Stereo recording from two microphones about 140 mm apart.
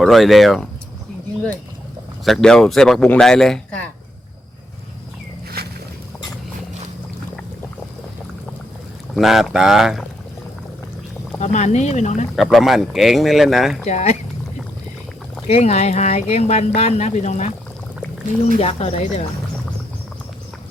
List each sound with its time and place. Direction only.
0.0 s speech: centre (ahead or behind)
2.2 s speech: 5° left (ahead or behind)
9.1 s speech: centre (ahead or behind)
11.3 s speech: 55° left (ahead or behind)
12.4 s speech: centre (ahead or behind)
13.8 s speech: 55° left (ahead or behind)
15.4 s speech: 50° left (ahead or behind)
18.5 s speech: 50° left (ahead or behind)